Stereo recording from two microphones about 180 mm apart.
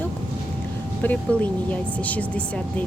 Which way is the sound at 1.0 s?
10° left (ahead or behind).